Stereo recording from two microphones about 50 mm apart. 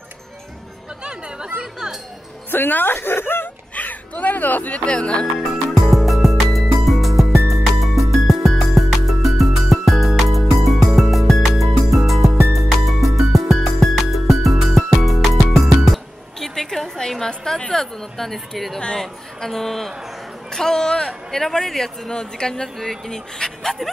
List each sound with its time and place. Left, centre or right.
2.5 s speech: left
3.7 s speech: left
5.2 s music: centre
17.6 s a woman's voice: centre